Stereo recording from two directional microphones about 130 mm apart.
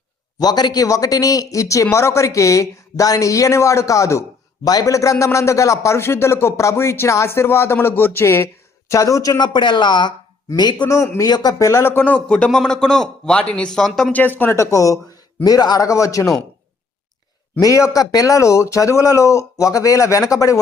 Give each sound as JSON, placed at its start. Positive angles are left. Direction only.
{"t": 0.3, "sound": "a man's voice", "side_deg": 30}
{"t": 17.6, "sound": "a man's voice", "side_deg": 25}